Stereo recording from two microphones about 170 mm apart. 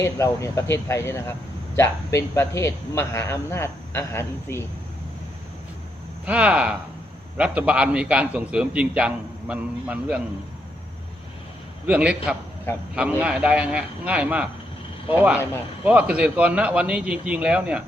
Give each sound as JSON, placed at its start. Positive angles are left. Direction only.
{"t": 0.0, "sound": "a man's voice", "side_deg": 15}
{"t": 6.2, "sound": "a man's voice", "side_deg": -5}
{"t": 11.9, "sound": "a man's voice", "side_deg": -5}